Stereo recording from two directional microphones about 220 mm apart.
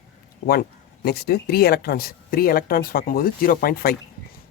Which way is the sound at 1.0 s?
45° left (ahead or behind).